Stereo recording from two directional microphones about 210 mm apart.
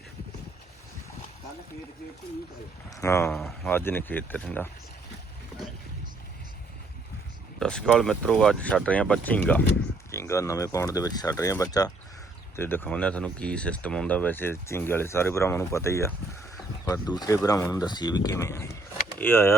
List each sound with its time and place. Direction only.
2.9 s speech: 15° left (ahead or behind)
3.3 s speech: centre (ahead or behind)
7.6 s speech: 5° left (ahead or behind)